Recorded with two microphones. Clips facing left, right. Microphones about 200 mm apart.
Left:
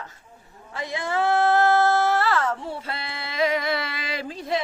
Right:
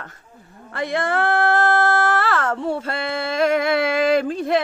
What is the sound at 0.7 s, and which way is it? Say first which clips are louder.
Female singing: right 4 dB; 65° right (ahead or behind).